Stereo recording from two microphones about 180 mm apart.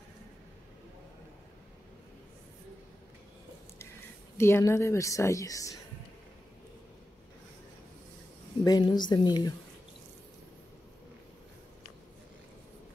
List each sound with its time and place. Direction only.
4.4 s a woman's voice: 15° left (ahead or behind)
8.6 s a woman's voice: 25° left (ahead or behind)